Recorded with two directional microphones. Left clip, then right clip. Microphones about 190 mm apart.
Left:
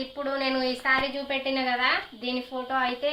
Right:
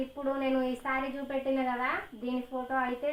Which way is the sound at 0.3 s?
30° left (ahead or behind).